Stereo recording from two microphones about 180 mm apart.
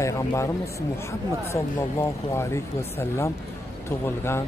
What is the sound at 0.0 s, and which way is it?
Speech, 15° left (ahead or behind).